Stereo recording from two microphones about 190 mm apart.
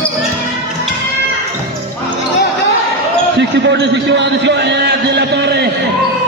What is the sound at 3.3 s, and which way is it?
A man's voice, 65° right (ahead or behind).